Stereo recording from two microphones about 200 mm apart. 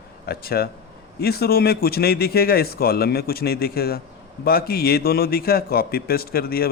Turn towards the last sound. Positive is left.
turn(degrees=50)  # may be behind; listen again after turning